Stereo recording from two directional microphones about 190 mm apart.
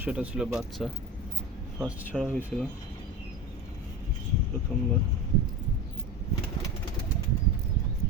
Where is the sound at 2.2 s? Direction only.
10° right (ahead or behind).